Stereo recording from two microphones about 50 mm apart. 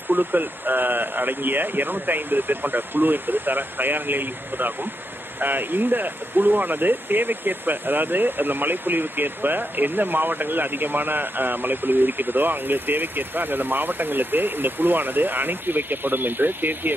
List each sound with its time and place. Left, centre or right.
0.1 s speech: right